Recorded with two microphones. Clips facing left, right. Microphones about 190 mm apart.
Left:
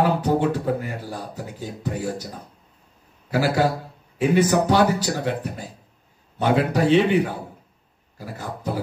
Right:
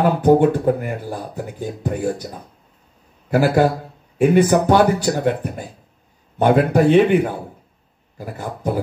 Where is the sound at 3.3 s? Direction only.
55° right (ahead or behind).